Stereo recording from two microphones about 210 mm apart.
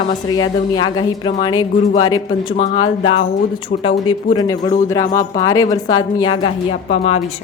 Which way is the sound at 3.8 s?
25° left (ahead or behind).